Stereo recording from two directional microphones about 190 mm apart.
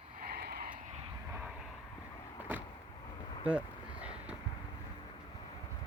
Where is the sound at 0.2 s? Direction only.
55° right (ahead or behind).